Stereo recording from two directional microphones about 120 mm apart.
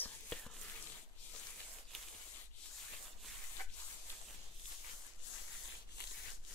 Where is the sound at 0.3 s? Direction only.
10° left (ahead or behind).